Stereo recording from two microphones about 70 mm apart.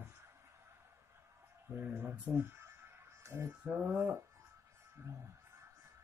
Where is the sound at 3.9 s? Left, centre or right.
Right.